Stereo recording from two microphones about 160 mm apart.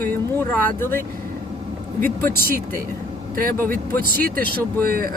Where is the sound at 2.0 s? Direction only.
65° right (ahead or behind).